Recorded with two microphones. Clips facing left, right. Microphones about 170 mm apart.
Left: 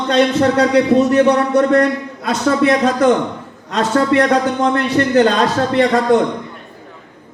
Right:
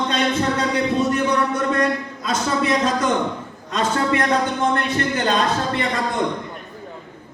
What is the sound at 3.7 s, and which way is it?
Speech, 70° left (ahead or behind).